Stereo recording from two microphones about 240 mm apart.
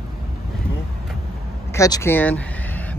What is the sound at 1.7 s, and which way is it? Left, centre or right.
Speech, centre.